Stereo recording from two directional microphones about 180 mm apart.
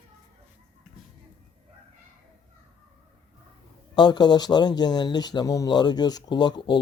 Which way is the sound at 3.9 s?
25° left (ahead or behind).